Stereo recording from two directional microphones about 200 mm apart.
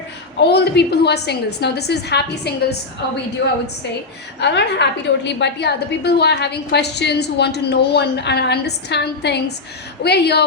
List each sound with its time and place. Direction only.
0.3 s a woman's voice: 55° left (ahead or behind)
4.4 s a woman's voice: 60° left (ahead or behind)